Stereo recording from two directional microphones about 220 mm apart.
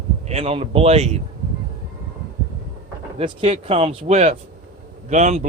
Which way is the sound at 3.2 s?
25° right (ahead or behind).